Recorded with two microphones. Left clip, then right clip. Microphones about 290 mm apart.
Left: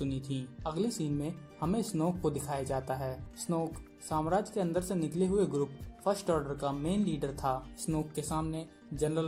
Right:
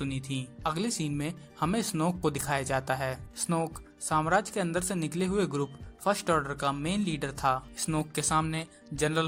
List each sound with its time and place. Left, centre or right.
0.3 s speech: right